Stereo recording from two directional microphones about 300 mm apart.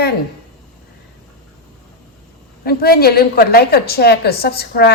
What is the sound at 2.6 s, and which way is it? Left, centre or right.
A woman's voice, left.